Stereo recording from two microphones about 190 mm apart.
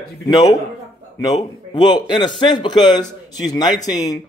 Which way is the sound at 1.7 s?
20° left (ahead or behind).